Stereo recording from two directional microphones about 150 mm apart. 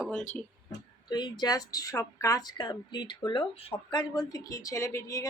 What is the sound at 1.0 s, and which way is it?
Speech, 30° left (ahead or behind).